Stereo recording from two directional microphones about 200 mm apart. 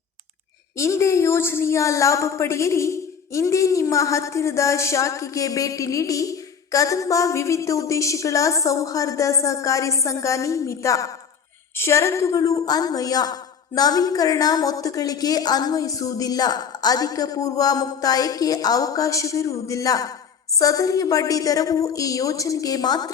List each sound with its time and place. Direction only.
0.8 s a woman's voice: 15° left (ahead or behind)